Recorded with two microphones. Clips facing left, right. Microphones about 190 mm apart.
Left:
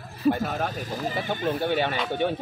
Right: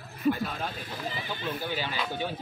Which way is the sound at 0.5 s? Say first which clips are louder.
Left 7 dB; 45° left (ahead or behind).